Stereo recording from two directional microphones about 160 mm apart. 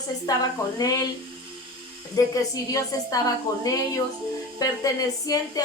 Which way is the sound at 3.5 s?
20° left (ahead or behind).